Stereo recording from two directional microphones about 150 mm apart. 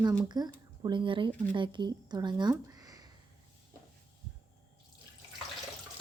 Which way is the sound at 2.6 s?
25° right (ahead or behind).